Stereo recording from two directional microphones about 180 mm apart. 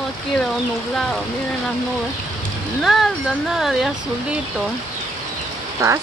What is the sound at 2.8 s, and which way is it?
Speech, centre (ahead or behind).